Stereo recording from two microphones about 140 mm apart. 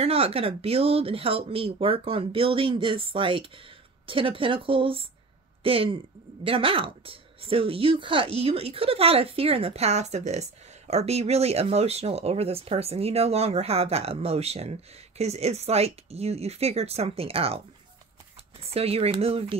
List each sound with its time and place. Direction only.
0.0 s speech: 45° right (ahead or behind)
18.6 s speech: 45° right (ahead or behind)